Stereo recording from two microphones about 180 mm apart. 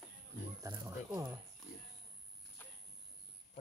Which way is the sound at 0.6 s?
15° right (ahead or behind).